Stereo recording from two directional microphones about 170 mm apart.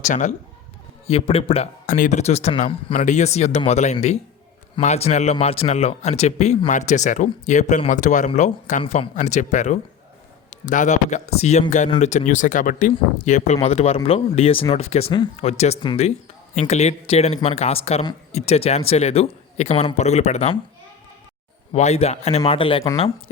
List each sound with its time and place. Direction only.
0.0 s speech: 45° left (ahead or behind)
1.0 s speech: 35° left (ahead or behind)
1.9 s speech: 50° left (ahead or behind)
2.9 s speech: 45° left (ahead or behind)
21.7 s speech: 40° left (ahead or behind)